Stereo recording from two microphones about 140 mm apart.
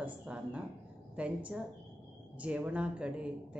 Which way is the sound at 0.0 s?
10° right (ahead or behind).